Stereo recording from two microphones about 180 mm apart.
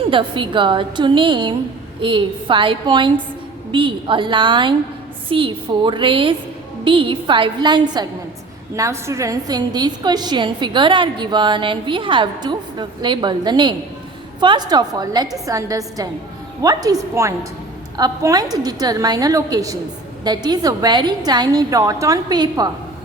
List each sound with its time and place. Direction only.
0.1 s a woman's voice: 25° right (ahead or behind)